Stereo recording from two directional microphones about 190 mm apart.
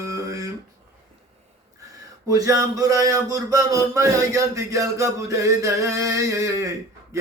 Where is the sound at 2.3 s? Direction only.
20° right (ahead or behind).